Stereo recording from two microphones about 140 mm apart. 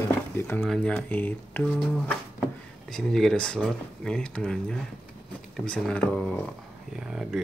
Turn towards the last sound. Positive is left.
turn(degrees=-5)  # may be behind; listen again after turning